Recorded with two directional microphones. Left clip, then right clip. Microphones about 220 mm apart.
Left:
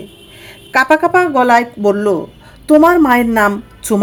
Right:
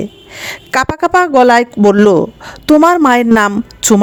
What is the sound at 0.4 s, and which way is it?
Speech, 35° right (ahead or behind).